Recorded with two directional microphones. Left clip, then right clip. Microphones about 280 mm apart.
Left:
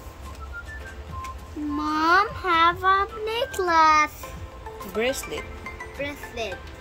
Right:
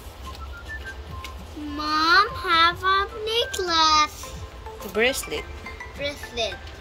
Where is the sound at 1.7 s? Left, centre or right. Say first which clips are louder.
Right 2 dB; left.